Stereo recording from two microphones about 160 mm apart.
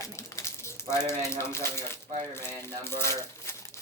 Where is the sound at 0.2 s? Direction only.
15° left (ahead or behind).